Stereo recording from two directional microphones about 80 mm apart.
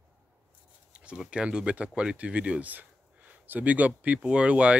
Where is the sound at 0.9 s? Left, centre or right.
Centre.